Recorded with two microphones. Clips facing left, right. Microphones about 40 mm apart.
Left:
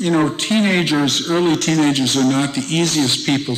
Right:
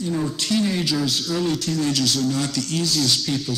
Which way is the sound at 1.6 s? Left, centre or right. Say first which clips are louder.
Left 8 dB; left.